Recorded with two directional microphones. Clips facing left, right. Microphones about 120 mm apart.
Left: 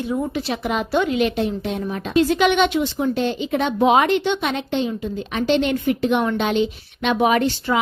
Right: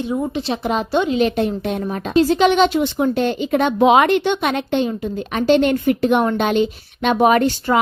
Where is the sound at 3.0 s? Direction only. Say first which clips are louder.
Right 3 dB; 50° right (ahead or behind).